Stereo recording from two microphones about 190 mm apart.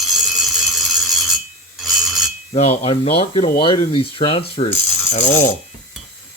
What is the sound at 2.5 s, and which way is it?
Speech, 35° left (ahead or behind).